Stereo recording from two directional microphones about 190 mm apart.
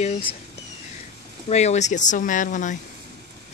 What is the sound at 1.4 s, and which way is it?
Speech, 35° left (ahead or behind).